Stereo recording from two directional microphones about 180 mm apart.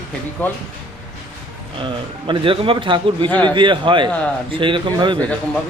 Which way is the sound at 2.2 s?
30° right (ahead or behind).